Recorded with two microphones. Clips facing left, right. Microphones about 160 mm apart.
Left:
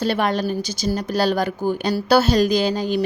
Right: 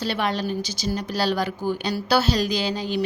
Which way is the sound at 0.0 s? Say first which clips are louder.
Left 5 dB; 50° left (ahead or behind).